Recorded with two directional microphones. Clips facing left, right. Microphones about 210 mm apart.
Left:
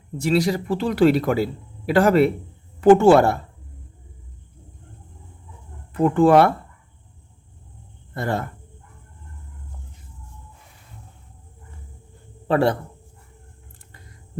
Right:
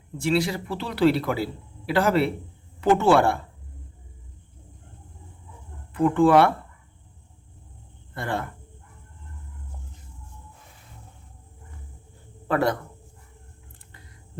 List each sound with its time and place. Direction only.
0.2 s speech: 40° left (ahead or behind)
5.9 s speech: 40° left (ahead or behind)
8.1 s speech: 40° left (ahead or behind)
12.5 s a man's voice: 30° left (ahead or behind)